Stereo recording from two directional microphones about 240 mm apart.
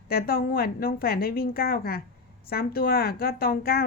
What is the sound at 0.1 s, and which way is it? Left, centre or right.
Speech, left.